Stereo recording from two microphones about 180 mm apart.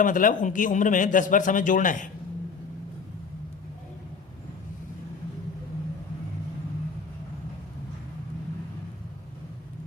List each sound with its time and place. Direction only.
0.0 s a man's voice: 45° left (ahead or behind)